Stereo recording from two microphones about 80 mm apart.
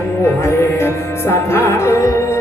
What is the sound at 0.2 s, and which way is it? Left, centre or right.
Music, left.